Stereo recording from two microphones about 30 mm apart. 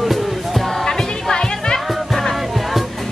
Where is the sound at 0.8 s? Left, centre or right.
Centre.